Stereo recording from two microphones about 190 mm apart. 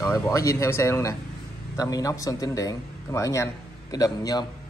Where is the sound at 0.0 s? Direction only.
15° left (ahead or behind).